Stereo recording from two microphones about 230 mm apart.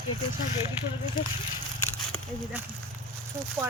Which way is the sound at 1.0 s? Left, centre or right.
Left.